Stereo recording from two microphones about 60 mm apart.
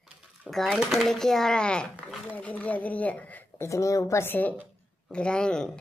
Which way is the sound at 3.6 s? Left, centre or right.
Left.